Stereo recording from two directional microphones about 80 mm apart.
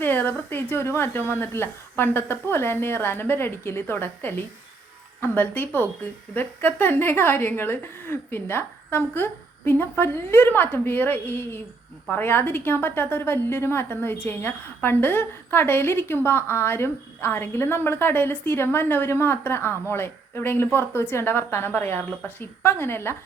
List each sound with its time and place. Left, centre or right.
0.0 s a woman's voice: left